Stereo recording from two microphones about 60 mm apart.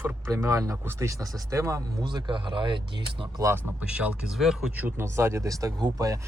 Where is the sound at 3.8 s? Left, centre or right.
Centre.